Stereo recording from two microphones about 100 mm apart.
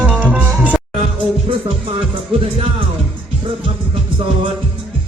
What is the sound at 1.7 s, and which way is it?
Speech, 60° right (ahead or behind).